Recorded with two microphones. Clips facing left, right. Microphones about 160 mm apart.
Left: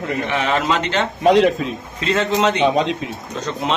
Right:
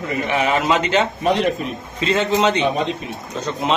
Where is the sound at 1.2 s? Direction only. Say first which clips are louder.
Left 5 dB; 90° left.